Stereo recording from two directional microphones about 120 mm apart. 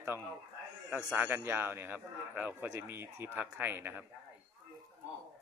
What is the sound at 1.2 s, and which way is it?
Speech, 15° right (ahead or behind).